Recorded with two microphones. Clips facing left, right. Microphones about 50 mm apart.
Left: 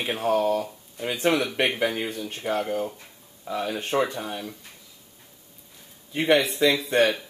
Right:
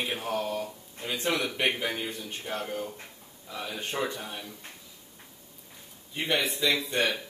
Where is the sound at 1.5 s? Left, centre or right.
Left.